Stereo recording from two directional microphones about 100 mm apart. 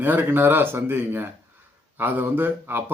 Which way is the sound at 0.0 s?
20° right (ahead or behind).